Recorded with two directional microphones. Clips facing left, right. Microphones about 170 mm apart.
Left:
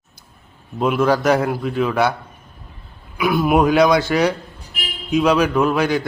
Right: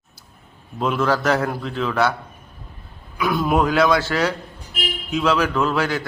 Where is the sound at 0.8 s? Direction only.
10° left (ahead or behind).